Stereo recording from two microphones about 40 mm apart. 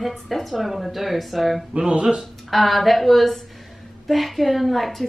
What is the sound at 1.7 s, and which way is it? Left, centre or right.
Speech, right.